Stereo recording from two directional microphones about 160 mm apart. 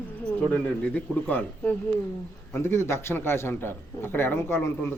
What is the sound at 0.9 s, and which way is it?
A man's voice, 10° left (ahead or behind).